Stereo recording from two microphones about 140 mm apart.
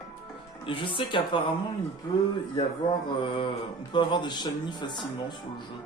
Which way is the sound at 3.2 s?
40° left (ahead or behind).